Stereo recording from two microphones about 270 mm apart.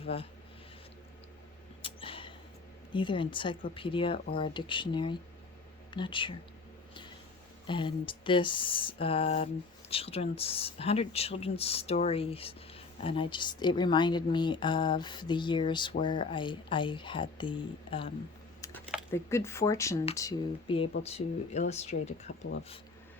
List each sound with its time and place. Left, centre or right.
0.0 s speech: left
1.8 s a sound: centre
2.9 s speech: centre
7.7 s speech: centre
19.1 s speech: centre